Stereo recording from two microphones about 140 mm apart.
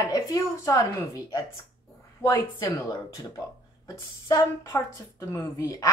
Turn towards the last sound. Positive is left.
turn(degrees=20)  # may be behind; listen again after turning